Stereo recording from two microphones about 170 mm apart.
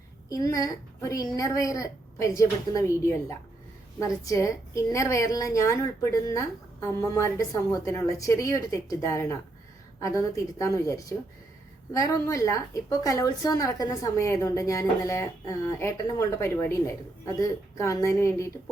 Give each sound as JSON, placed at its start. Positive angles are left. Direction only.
{"t": 0.3, "sound": "a woman's voice", "side_deg": 20}